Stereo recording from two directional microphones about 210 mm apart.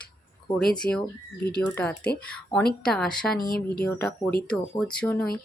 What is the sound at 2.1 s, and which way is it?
Speech, 5° left (ahead or behind).